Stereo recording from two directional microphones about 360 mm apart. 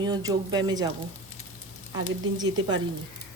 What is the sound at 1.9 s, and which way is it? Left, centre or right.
Speech, centre.